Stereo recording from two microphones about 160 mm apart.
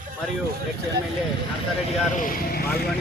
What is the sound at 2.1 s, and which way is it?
Speech, 60° left (ahead or behind).